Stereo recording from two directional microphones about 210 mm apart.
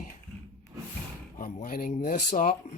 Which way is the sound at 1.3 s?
40° left (ahead or behind).